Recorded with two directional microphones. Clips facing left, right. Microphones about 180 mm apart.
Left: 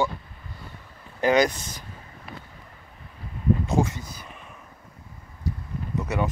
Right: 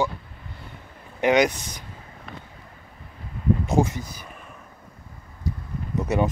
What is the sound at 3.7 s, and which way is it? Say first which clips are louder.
Speech: right 2 dB; 35° right (ahead or behind).